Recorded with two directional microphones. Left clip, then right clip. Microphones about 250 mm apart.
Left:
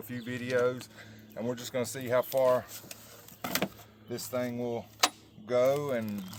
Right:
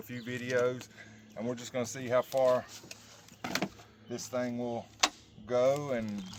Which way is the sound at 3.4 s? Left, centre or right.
Left.